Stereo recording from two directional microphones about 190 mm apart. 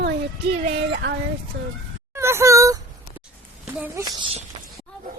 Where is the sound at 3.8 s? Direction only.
10° right (ahead or behind).